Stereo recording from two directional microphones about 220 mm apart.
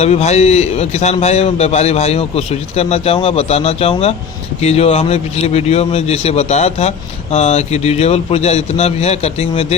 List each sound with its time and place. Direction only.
0.0 s a man's voice: 30° left (ahead or behind)